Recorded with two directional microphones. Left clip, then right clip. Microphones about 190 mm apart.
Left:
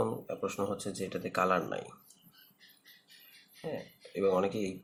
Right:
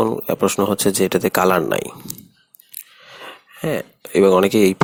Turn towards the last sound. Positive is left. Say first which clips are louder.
# right 17 dB
turn(degrees=-55)  # may be behind; listen again after turning